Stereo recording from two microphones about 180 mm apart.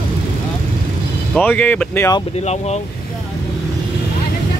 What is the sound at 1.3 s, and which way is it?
Speech, 10° left (ahead or behind).